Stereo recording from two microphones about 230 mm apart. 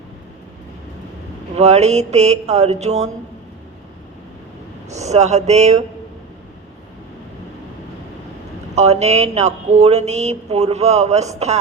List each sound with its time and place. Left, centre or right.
1.5 s speech: right
4.9 s speech: right
8.7 s speech: right